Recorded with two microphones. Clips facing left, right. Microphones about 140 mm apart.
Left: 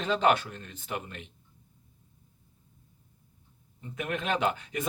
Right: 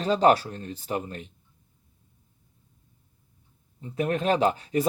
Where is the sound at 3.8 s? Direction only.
35° right (ahead or behind).